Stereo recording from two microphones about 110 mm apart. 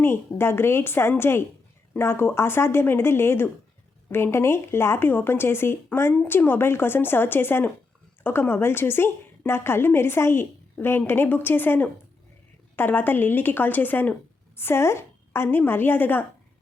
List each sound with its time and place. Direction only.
0.0 s a woman's voice: 20° left (ahead or behind)